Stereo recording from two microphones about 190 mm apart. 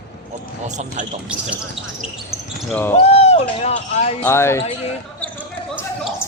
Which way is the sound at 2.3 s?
Centre (ahead or behind).